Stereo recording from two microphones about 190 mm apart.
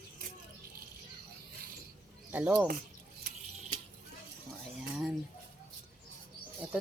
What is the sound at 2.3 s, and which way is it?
Speech, 10° right (ahead or behind).